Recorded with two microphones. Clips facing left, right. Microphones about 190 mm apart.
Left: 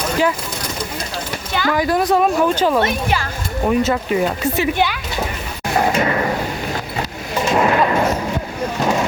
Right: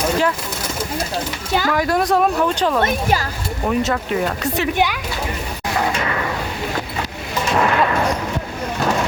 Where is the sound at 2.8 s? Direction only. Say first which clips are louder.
Right 1 dB; 40° right (ahead or behind).